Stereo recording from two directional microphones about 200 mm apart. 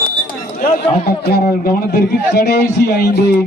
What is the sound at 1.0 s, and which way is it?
A man's voice, 50° left (ahead or behind).